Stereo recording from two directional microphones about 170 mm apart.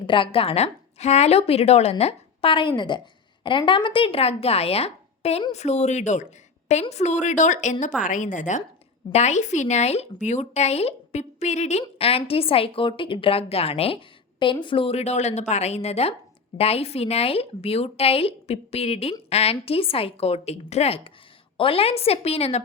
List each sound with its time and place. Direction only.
0.0 s speech: 30° left (ahead or behind)